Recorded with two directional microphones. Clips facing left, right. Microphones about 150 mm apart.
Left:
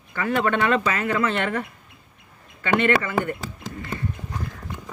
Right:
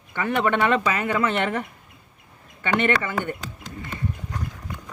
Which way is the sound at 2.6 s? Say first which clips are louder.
Left 2 dB; 20° right (ahead or behind).